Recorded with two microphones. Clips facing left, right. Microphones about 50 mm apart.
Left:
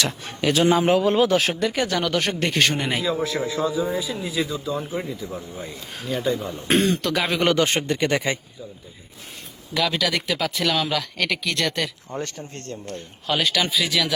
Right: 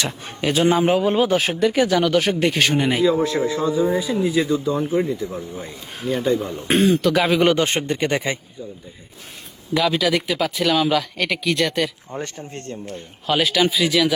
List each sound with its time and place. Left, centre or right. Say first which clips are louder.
0.0 s a man's voice: even; right
0.8 s a man's voice: right 1 dB; centre
1.5 s speech: right 5 dB; centre
6.0 s a man's voice: right 4 dB; centre
6.2 s speech: right 2 dB; centre
7.5 s a man's voice: right 1 dB; right
9.7 s speech: right 4 dB; centre
12.2 s a man's voice: right 2 dB; right
12.8 s speech: right 2 dB; centre